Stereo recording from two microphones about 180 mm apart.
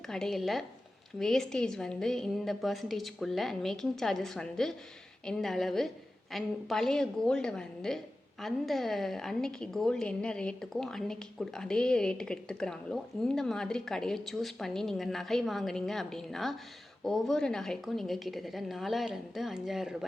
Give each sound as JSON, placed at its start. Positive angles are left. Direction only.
{"t": 0.1, "sound": "a woman's voice", "side_deg": 0}